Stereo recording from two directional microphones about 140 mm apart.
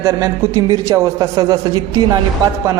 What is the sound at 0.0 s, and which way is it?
A man's voice, 25° right (ahead or behind).